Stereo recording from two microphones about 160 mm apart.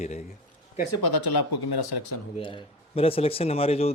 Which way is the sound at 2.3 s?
30° left (ahead or behind).